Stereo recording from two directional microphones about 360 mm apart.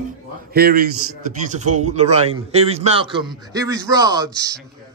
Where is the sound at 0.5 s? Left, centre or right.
Right.